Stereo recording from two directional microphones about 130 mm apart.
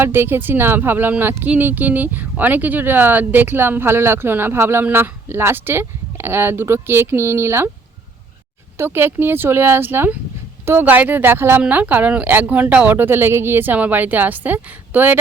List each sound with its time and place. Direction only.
0.0 s speech: 15° right (ahead or behind)
8.8 s speech: 15° right (ahead or behind)